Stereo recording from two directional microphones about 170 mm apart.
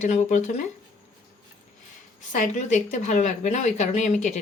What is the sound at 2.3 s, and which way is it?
Speech, 45° left (ahead or behind).